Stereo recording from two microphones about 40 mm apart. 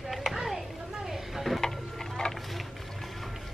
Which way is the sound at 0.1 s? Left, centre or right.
Centre.